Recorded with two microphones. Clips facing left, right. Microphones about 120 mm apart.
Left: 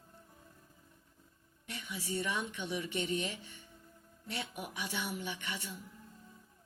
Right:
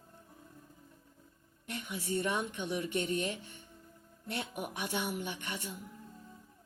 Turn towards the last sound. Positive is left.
turn(degrees=-55)  # may be behind; listen again after turning